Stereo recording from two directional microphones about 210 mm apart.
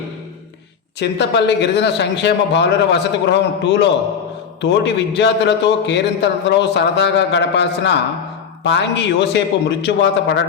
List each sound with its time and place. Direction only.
0.9 s a man's voice: 55° left (ahead or behind)